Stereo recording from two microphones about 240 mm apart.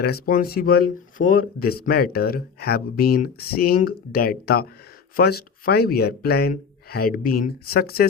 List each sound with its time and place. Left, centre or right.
0.0 s speech: left